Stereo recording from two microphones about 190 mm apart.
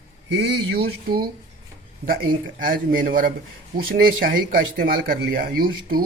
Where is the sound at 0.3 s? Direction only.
60° right (ahead or behind).